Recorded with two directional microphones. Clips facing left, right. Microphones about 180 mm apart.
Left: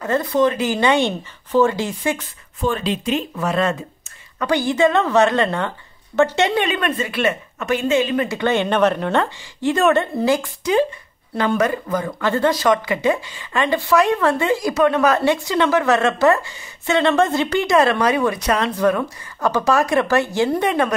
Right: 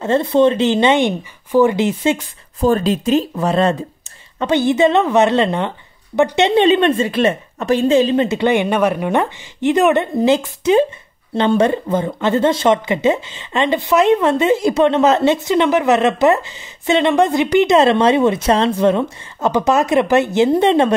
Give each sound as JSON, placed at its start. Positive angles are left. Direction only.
{"t": 0.0, "sound": "speech", "side_deg": -25}
{"t": 2.6, "sound": "speech", "side_deg": -40}